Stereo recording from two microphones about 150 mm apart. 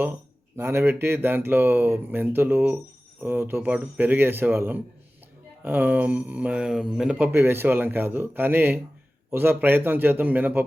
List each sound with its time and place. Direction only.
0.0 s speech: 15° right (ahead or behind)